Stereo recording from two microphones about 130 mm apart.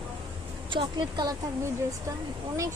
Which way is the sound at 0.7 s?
40° right (ahead or behind).